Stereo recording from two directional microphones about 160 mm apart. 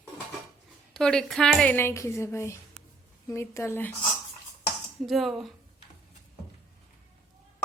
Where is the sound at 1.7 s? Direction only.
15° left (ahead or behind).